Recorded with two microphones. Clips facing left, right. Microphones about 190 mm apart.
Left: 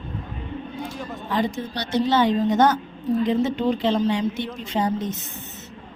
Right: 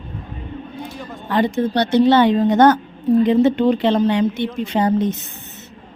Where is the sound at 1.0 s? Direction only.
Centre (ahead or behind).